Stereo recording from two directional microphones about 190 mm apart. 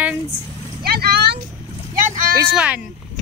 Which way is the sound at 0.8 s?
55° right (ahead or behind).